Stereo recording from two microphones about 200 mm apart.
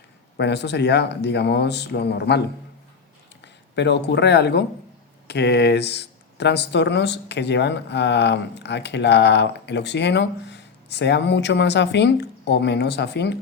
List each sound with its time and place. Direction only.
0.3 s speech: 60° left (ahead or behind)